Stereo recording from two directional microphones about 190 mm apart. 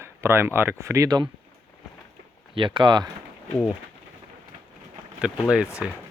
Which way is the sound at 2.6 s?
25° right (ahead or behind).